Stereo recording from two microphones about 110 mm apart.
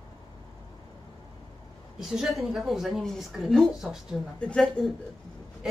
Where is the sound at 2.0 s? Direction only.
5° right (ahead or behind).